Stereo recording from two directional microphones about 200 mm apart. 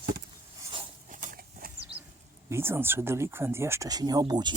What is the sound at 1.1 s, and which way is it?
Horse, 40° right (ahead or behind).